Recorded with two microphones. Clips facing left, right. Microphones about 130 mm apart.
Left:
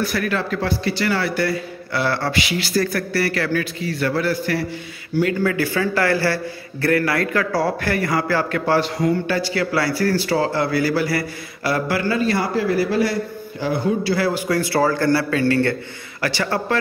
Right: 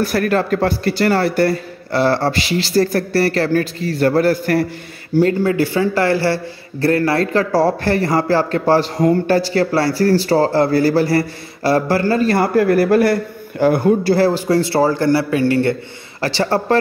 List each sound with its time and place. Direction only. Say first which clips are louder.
0.0 s a man's voice: right 6 dB; 45° right (ahead or behind)
5.1 s a man's voice: right 5 dB; 35° right (ahead or behind)
16.2 s a man's voice: right 5 dB; 30° right (ahead or behind)